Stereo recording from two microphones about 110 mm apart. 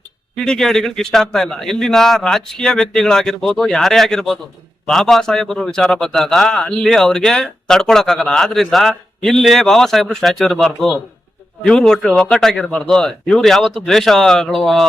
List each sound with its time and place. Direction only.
0.3 s a man's voice: 5° left (ahead or behind)